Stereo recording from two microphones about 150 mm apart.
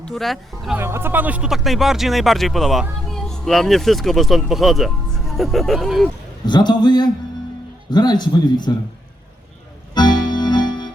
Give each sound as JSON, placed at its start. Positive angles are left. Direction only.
{"t": 0.0, "sound": "speech", "side_deg": 0}
{"t": 0.8, "sound": "speech", "side_deg": -15}
{"t": 6.4, "sound": "speech", "side_deg": 30}
{"t": 9.9, "sound": "music", "side_deg": 30}